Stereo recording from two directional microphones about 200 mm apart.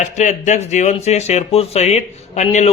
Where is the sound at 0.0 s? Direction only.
35° left (ahead or behind).